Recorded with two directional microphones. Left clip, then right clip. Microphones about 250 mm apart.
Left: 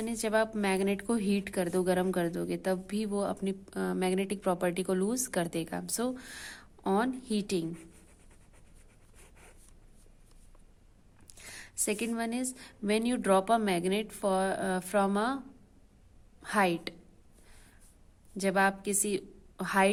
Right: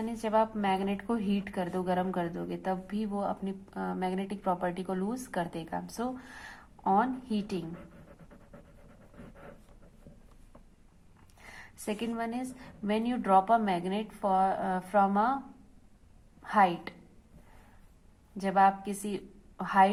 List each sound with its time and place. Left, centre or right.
0.0 s a woman's voice: left
11.4 s a woman's voice: left
16.4 s a woman's voice: left
18.3 s a woman's voice: left